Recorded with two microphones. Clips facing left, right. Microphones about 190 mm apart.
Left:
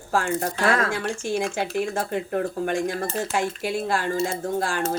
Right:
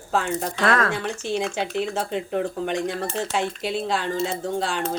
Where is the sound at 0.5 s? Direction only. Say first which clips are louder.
Right 1 dB; 60° right (ahead or behind).